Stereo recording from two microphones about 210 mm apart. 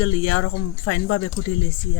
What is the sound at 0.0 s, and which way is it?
Speech, 80° left.